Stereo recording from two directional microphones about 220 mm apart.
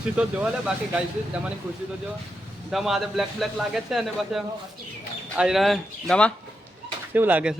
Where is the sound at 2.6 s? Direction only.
Centre (ahead or behind).